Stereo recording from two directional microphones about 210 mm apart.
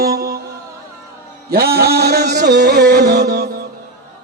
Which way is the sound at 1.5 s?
45° right (ahead or behind).